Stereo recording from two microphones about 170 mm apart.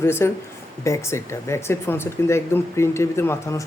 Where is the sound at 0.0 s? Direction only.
15° left (ahead or behind).